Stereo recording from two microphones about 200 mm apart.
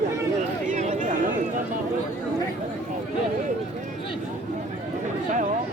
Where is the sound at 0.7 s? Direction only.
40° right (ahead or behind).